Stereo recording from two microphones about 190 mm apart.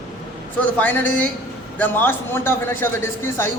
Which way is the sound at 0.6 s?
10° left (ahead or behind).